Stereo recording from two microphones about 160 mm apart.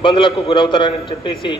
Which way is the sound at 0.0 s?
30° left (ahead or behind).